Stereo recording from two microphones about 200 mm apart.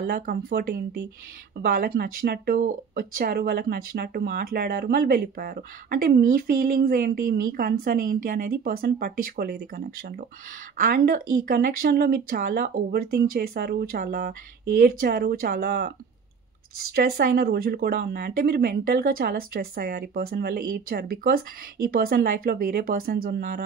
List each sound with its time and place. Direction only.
0.0 s speech: 50° right (ahead or behind)
16.9 s speech: 50° right (ahead or behind)